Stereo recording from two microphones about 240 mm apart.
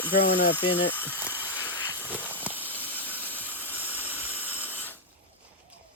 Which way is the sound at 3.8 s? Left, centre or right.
Centre.